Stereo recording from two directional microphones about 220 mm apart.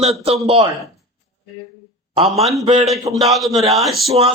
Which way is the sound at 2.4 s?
Centre (ahead or behind).